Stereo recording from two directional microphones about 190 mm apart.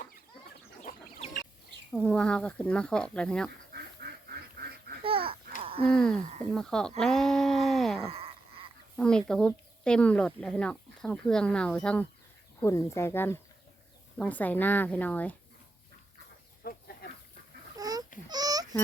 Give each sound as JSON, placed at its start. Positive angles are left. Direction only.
{"t": 0.8, "sound": "duck", "side_deg": 40}
{"t": 1.9, "sound": "speech", "side_deg": 5}
{"t": 4.0, "sound": "duck", "side_deg": -50}
{"t": 5.0, "sound": "babbling", "side_deg": -30}
{"t": 5.8, "sound": "speech", "side_deg": 5}
{"t": 8.0, "sound": "wail", "side_deg": -30}
{"t": 9.0, "sound": "a woman's voice", "side_deg": 5}
{"t": 16.6, "sound": "a sound", "side_deg": 50}
{"t": 17.7, "sound": "babbling", "side_deg": -20}
{"t": 18.3, "sound": "a sound", "side_deg": -20}